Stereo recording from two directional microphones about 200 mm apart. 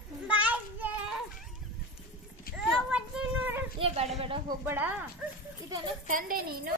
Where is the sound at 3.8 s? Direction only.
30° right (ahead or behind).